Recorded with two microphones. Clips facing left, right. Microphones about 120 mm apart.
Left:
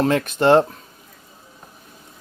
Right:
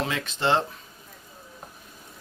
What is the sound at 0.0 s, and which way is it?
Speech, 50° left (ahead or behind).